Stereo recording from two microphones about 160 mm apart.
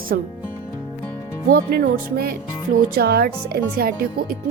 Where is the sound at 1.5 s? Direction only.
70° right (ahead or behind).